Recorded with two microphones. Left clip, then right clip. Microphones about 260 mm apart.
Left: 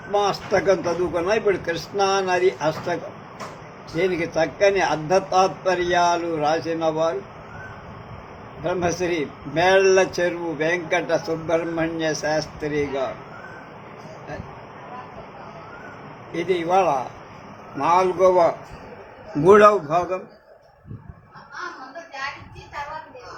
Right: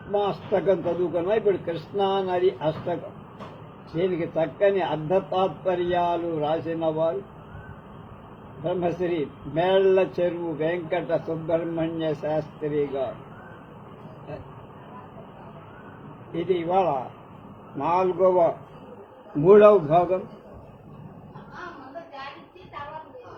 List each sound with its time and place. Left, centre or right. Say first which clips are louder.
0.1 s a man's voice: left 4 dB; left
8.6 s a man's voice: left 3 dB; left
16.5 s a man's voice: left 4 dB; left